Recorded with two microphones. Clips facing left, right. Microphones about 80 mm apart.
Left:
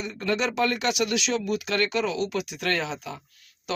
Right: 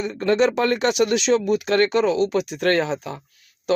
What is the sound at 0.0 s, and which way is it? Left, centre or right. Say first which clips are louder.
Speech: right 8 dB; right.